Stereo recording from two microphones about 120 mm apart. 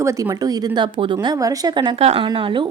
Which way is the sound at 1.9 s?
55° right (ahead or behind).